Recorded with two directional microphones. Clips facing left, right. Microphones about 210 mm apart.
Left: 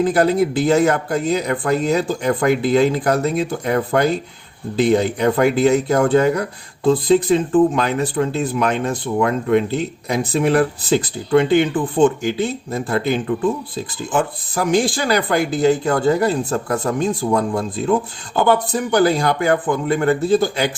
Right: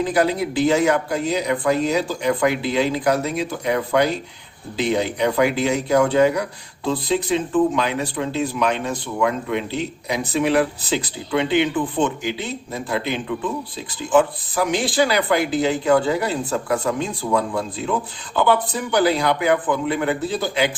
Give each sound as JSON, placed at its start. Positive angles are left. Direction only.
{"t": 0.0, "sound": "speech", "side_deg": 50}